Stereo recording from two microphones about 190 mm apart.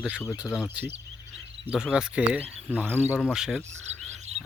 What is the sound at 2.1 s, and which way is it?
Speech, 5° right (ahead or behind).